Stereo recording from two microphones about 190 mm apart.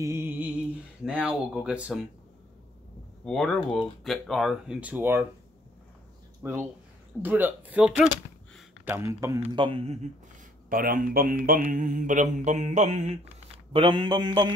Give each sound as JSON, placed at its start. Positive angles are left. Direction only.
{"t": 0.0, "sound": "music", "side_deg": -15}
{"t": 1.0, "sound": "speech", "side_deg": -5}
{"t": 3.3, "sound": "speech", "side_deg": 5}
{"t": 6.4, "sound": "speech", "side_deg": -15}
{"t": 10.7, "sound": "speech", "side_deg": -50}
{"t": 13.7, "sound": "a man's voice", "side_deg": -25}